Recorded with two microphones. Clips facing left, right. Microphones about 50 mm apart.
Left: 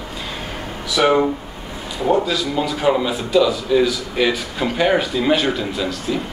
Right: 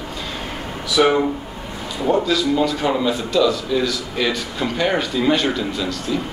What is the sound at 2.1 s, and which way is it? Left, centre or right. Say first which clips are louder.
A man's voice: right 1 dB; centre.